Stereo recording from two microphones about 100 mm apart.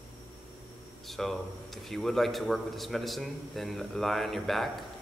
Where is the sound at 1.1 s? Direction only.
Centre (ahead or behind).